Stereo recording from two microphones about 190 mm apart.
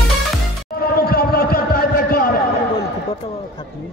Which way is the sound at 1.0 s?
50° left (ahead or behind).